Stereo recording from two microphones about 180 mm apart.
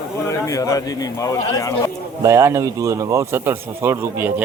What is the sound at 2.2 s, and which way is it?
Speech, 15° right (ahead or behind).